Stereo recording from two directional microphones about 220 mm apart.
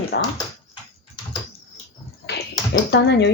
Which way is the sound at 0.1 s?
50° left (ahead or behind).